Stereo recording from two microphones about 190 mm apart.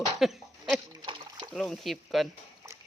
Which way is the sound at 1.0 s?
25° right (ahead or behind).